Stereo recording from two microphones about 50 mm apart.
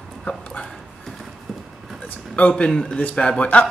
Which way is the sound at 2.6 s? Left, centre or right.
Centre.